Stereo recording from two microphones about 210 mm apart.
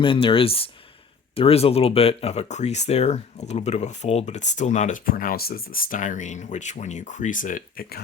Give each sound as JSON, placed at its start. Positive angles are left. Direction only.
{"t": 0.0, "sound": "speech", "side_deg": 25}